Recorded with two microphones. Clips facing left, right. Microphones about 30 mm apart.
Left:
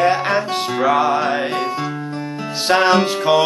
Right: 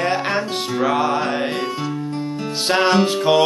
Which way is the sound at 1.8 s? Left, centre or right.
Centre.